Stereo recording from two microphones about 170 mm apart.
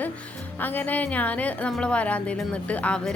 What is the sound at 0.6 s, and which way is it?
A woman's voice, 10° left (ahead or behind).